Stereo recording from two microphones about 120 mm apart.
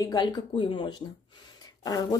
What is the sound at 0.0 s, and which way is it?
Speech, 30° left (ahead or behind).